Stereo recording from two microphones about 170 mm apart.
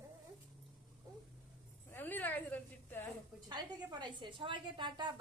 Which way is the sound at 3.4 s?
25° right (ahead or behind).